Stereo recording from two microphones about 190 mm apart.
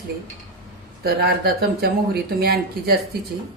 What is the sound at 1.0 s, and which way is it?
Speech, 55° right (ahead or behind).